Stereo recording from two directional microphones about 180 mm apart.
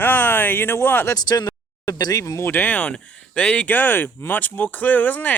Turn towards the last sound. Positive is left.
turn(degrees=10)  # may be behind; listen again after turning